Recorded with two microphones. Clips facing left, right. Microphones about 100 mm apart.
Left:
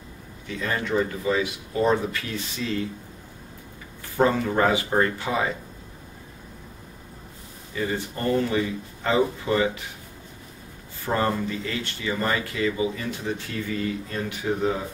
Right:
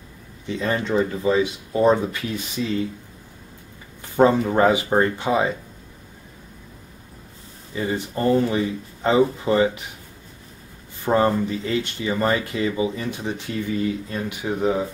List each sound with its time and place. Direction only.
0.5 s speech: 25° right (ahead or behind)
4.2 s speech: 25° right (ahead or behind)
7.7 s speech: 20° right (ahead or behind)
11.1 s speech: 20° right (ahead or behind)